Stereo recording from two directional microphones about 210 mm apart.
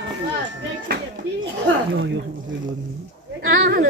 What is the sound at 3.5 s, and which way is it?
Speech, 50° right (ahead or behind).